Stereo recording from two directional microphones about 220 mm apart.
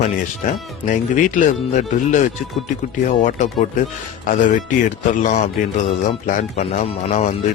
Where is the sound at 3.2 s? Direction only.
35° left (ahead or behind).